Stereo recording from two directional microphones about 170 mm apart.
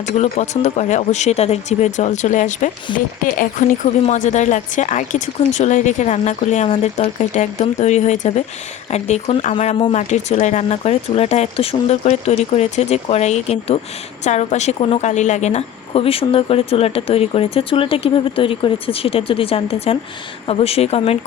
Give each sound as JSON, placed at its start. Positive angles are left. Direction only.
{"t": 0.0, "sound": "a woman's voice", "side_deg": 40}